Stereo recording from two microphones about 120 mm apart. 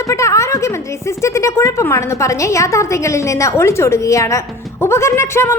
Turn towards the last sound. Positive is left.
turn(degrees=20)  # may be behind; listen again after turning